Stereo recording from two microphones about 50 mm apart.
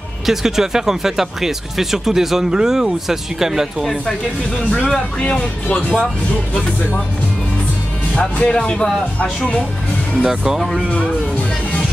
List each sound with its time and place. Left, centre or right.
0.3 s speech: centre
4.6 s speech: centre
5.2 s speech: left
8.1 s speech: left
10.2 s speech: centre